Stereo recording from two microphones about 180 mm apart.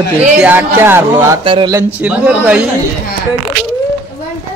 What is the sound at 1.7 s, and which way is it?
Speech, 10° right (ahead or behind).